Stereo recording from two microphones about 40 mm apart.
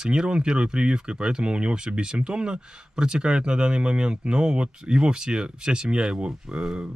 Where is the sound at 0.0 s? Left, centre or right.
Right.